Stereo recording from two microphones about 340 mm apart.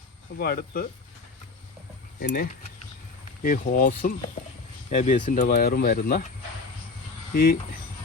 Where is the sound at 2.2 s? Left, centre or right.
Left.